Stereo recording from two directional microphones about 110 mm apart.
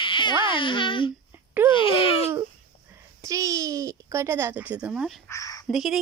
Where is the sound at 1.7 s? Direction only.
55° left (ahead or behind).